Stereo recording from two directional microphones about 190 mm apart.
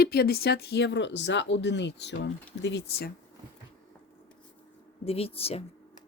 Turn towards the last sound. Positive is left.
turn(degrees=30)  # may be behind; listen again after turning